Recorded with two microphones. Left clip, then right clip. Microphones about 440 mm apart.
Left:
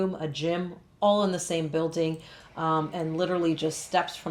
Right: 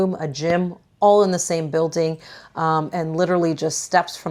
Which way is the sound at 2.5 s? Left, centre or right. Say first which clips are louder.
Right 7 dB; right.